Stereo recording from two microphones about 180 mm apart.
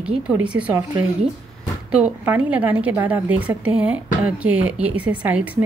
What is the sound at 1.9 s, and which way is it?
A woman's voice, 5° right (ahead or behind).